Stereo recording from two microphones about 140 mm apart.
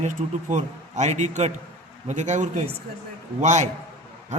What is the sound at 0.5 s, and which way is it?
A man's voice, 55° right (ahead or behind).